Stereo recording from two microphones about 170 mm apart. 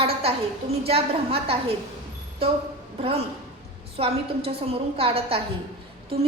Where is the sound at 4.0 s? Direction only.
35° right (ahead or behind).